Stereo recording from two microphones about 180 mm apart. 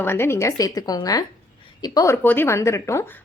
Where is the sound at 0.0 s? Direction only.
15° left (ahead or behind).